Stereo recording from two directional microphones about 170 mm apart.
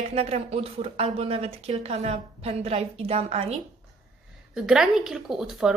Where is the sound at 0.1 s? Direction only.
35° right (ahead or behind).